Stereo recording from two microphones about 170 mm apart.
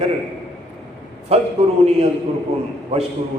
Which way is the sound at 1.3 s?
35° right (ahead or behind).